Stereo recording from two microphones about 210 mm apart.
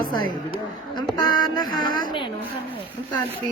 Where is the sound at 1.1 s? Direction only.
20° left (ahead or behind).